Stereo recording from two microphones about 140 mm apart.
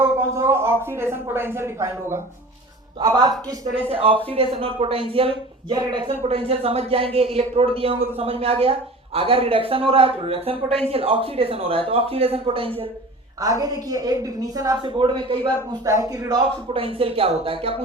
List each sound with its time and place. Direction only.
0.0 s a woman's voice: 15° right (ahead or behind)
3.8 s a man's voice: 40° right (ahead or behind)
6.2 s a man's voice: 45° right (ahead or behind)
13.4 s a woman's voice: 25° right (ahead or behind)
14.8 s a man's voice: 35° right (ahead or behind)
15.8 s a woman's voice: 25° right (ahead or behind)
16.6 s speech: 40° right (ahead or behind)